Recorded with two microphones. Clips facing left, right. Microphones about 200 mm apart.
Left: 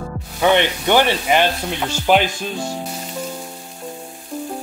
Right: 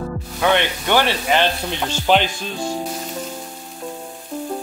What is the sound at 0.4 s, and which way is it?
Speech, 15° left (ahead or behind).